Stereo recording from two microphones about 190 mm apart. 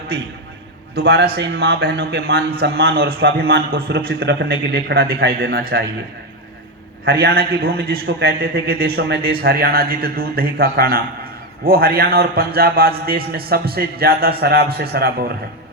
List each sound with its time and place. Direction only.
0.9 s a man's voice: 55° right (ahead or behind)
7.0 s a man's voice: 55° right (ahead or behind)